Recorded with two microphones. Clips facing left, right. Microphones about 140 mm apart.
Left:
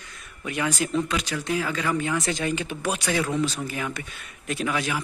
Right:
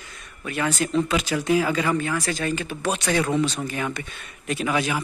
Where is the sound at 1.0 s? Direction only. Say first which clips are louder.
Right 5 dB; 5° right (ahead or behind).